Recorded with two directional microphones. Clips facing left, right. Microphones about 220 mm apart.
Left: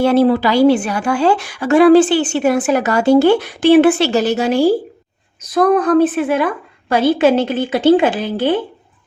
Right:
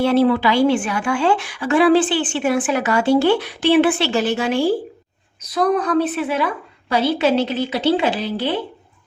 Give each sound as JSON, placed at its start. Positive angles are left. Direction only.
{"t": 0.0, "sound": "a woman's voice", "side_deg": 45}